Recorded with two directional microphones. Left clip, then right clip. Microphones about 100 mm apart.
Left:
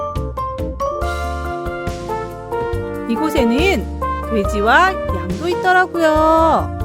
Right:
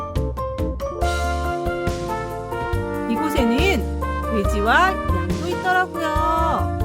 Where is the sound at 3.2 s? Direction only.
90° left.